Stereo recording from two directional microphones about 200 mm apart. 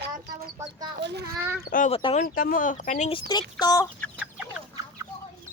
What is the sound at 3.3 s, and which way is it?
Speech, 20° left (ahead or behind).